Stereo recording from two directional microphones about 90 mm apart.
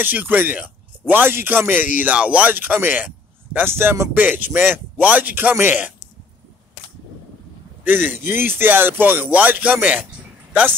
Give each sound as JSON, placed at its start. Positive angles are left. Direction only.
{"t": 0.0, "sound": "a man's voice", "side_deg": -20}
{"t": 7.8, "sound": "a man's voice", "side_deg": -20}